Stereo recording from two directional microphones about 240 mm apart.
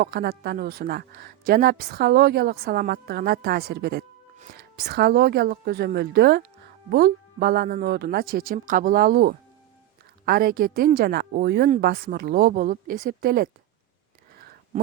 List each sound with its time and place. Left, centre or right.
0.0 s a woman's voice: right